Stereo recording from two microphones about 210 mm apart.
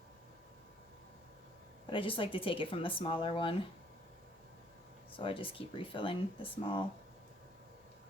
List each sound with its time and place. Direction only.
1.9 s speech: 25° left (ahead or behind)
5.1 s speech: 25° left (ahead or behind)